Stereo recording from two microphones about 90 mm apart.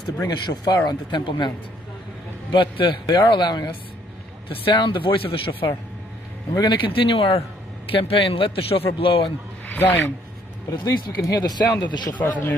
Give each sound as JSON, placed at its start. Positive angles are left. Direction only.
{"t": 0.3, "sound": "speech", "side_deg": 50}
{"t": 2.5, "sound": "a man's voice", "side_deg": 65}
{"t": 4.5, "sound": "speech", "side_deg": 65}
{"t": 6.5, "sound": "speech", "side_deg": 50}
{"t": 6.9, "sound": "a man's voice", "side_deg": 90}
{"t": 9.7, "sound": "speech", "side_deg": 20}
{"t": 10.7, "sound": "a man's voice", "side_deg": 40}
{"t": 12.1, "sound": "speech", "side_deg": 20}